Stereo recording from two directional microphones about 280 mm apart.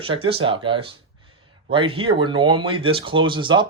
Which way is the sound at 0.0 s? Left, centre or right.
Centre.